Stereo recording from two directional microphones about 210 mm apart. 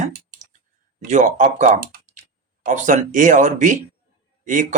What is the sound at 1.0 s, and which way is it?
Speech, 35° right (ahead or behind).